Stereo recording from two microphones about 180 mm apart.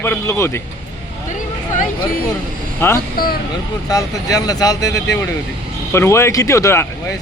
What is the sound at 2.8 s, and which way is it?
Speech, 10° left (ahead or behind).